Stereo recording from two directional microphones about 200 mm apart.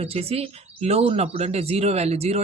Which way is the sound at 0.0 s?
30° right (ahead or behind).